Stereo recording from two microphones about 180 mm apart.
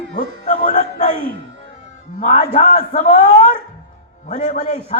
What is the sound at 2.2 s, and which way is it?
A man's voice, 40° left (ahead or behind).